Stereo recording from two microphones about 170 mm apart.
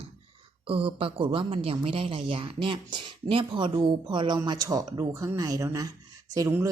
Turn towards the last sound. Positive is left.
turn(degrees=-20)  # may be behind; listen again after turning